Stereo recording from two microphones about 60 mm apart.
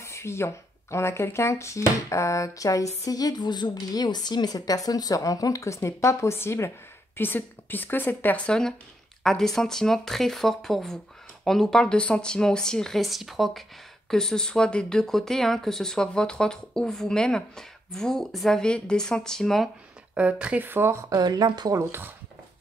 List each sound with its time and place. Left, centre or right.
0.0 s speech: left
4.5 s speech: left
7.2 s a woman's voice: left
8.5 s speech: centre
20.2 s speech: right
20.6 s speech: right
21.1 s a woman's voice: right